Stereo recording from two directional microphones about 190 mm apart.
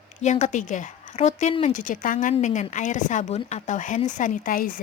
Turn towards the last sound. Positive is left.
turn(degrees=45)  # may be behind; listen again after turning